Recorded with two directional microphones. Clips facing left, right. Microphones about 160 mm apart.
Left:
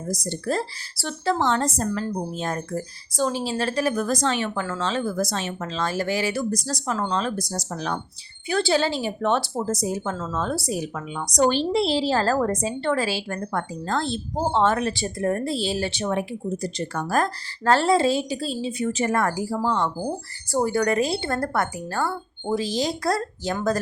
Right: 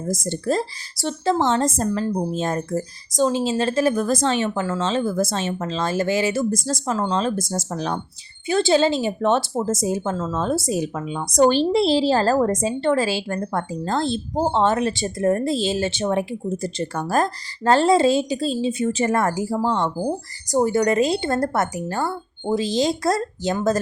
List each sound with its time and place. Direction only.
0.3 s speech: 20° right (ahead or behind)